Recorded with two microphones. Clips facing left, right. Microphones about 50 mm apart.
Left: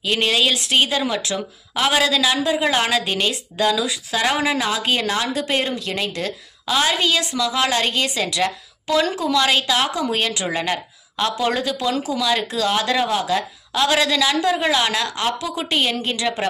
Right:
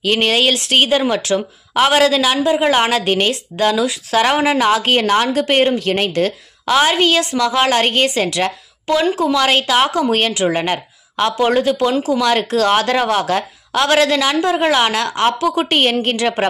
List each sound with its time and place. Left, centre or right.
0.0 s speech: right
6.7 s a woman's voice: right